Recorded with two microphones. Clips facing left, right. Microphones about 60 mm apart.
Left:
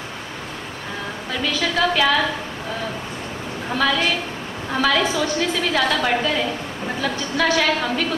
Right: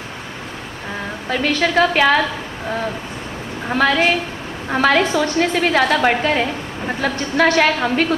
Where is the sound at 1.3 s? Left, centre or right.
Right.